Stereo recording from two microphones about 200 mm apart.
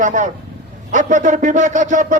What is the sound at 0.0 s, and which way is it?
Speech, 40° right (ahead or behind).